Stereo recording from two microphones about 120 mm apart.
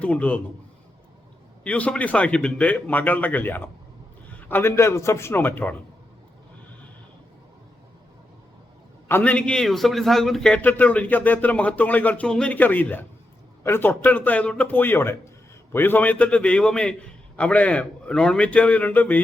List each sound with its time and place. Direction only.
0.0 s a man's voice: 10° left (ahead or behind)
1.6 s a man's voice: 10° left (ahead or behind)
9.0 s a man's voice: 15° left (ahead or behind)
10.6 s a man's voice: 15° left (ahead or behind)